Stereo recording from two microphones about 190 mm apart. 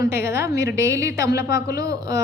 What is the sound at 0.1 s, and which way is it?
A woman's voice, 15° right (ahead or behind).